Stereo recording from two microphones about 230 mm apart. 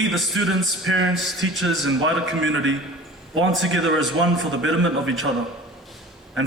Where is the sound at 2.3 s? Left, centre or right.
Right.